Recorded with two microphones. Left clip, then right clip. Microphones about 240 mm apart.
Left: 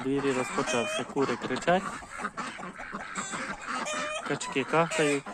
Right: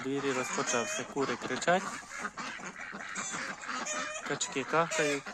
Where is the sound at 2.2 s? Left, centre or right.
Left.